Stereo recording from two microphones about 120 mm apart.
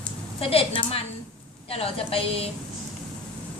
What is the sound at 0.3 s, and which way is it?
A woman's voice, 50° left (ahead or behind).